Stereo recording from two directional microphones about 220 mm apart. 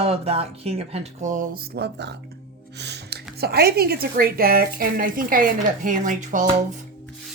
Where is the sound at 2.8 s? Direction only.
50° right (ahead or behind).